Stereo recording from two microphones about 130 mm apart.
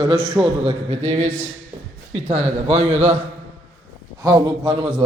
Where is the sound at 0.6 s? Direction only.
45° right (ahead or behind).